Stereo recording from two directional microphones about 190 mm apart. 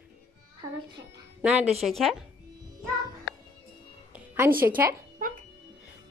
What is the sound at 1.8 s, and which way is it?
Speech, centre (ahead or behind).